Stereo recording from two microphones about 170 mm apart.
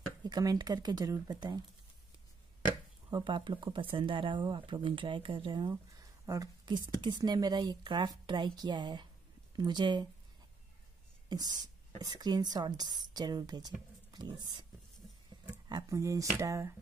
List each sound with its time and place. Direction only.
0.2 s speech: 25° right (ahead or behind)
3.1 s speech: 25° right (ahead or behind)
11.2 s speech: 25° right (ahead or behind)
15.7 s speech: 20° right (ahead or behind)
16.3 s a sound: 15° right (ahead or behind)